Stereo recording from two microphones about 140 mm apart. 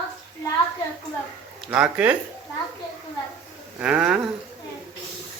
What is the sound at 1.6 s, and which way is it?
Speech, 10° right (ahead or behind).